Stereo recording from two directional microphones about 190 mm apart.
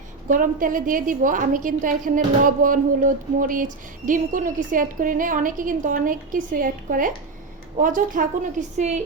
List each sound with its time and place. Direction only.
0.3 s a woman's voice: 45° right (ahead or behind)